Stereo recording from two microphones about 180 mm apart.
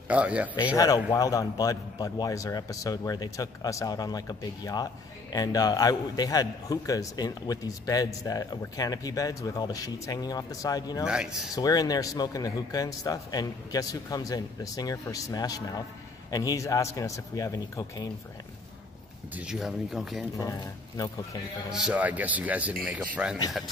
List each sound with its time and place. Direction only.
0.1 s speech: 10° right (ahead or behind)
0.7 s a man's voice: 20° left (ahead or behind)
19.3 s speech: 5° right (ahead or behind)
20.3 s a man's voice: 20° left (ahead or behind)
21.6 s speech: 5° right (ahead or behind)